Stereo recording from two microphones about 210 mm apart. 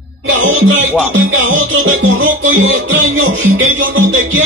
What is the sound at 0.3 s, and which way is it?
Music, 70° right (ahead or behind).